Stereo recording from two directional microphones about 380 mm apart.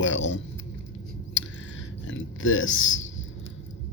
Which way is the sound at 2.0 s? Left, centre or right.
Left.